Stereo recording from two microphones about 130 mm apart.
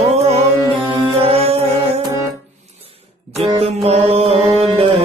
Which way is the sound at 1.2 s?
50° right (ahead or behind).